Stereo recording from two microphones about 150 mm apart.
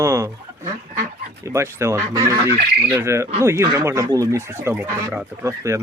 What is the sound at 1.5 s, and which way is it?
Speech, 20° right (ahead or behind).